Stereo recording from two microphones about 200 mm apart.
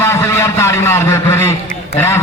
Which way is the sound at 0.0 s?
15° left (ahead or behind).